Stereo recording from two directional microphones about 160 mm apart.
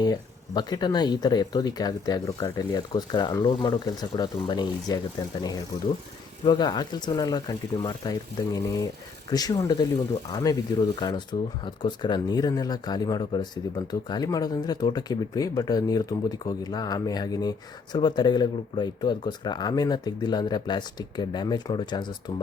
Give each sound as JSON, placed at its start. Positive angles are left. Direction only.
{"t": 0.0, "sound": "speech", "side_deg": 25}
{"t": 6.4, "sound": "speech", "side_deg": 30}